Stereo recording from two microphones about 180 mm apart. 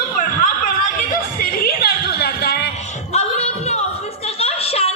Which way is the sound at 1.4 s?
55° left (ahead or behind).